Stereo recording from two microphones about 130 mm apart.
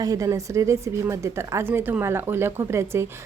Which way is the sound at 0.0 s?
25° right (ahead or behind).